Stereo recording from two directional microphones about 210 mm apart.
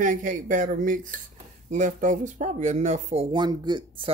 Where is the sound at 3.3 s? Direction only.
20° right (ahead or behind).